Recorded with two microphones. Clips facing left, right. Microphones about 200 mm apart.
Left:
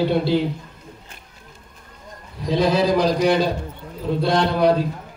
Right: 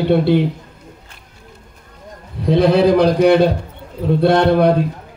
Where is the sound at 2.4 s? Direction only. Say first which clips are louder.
Right 6 dB; 60° right (ahead or behind).